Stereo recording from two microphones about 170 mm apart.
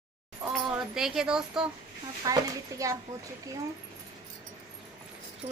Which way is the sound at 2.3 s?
20° right (ahead or behind).